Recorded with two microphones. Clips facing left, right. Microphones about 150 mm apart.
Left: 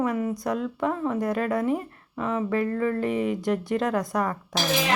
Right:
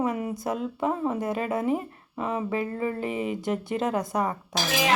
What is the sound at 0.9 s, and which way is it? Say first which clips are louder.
Speech: left 1 dB; 20° right (ahead or behind).